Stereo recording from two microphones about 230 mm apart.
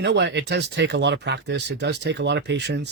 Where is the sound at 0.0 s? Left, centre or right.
Right.